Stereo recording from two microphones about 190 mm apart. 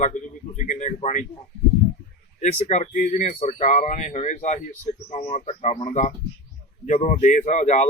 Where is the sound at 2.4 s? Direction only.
35° left (ahead or behind).